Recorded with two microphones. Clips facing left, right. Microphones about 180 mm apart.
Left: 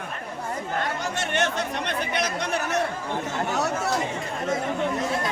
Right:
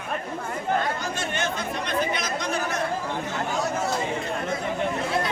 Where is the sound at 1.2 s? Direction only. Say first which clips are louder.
Left 3 dB; 75° left (ahead or behind).